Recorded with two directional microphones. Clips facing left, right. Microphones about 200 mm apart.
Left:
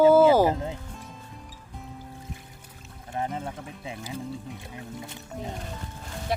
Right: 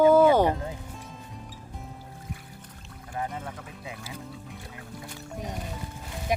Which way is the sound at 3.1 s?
25° left (ahead or behind).